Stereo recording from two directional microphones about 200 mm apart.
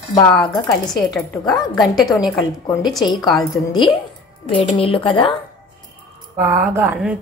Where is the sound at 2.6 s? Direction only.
20° left (ahead or behind).